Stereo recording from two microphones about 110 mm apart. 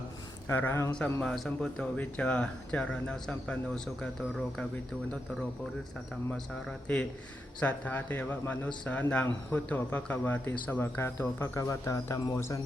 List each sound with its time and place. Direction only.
0.4 s speech: 20° left (ahead or behind)
1.2 s speech: 5° left (ahead or behind)
6.3 s speech: 5° left (ahead or behind); by 12.2 s 30° left (ahead or behind)